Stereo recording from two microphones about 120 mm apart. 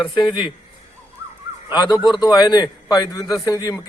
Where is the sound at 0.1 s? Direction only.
40° left (ahead or behind).